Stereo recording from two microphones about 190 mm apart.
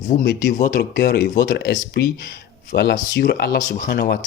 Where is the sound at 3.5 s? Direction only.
45° left (ahead or behind).